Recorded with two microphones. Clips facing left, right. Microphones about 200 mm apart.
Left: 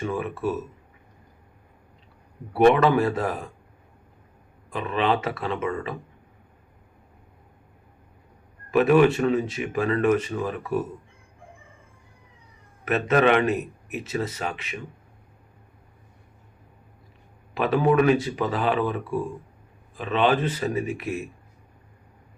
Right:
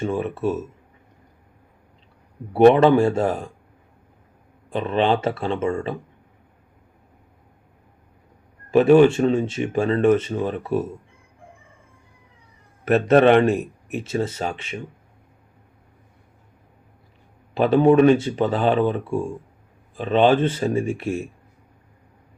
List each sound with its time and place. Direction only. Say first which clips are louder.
0.0 s speech: right 4 dB; 25° right (ahead or behind)
2.6 s speech: right 5 dB; 30° right (ahead or behind)
4.7 s speech: right 4 dB; 30° right (ahead or behind)
8.7 s speech: right 4 dB; 30° right (ahead or behind)
12.8 s a man's voice: right 6 dB; 30° right (ahead or behind)
17.5 s speech: right 6 dB; 30° right (ahead or behind)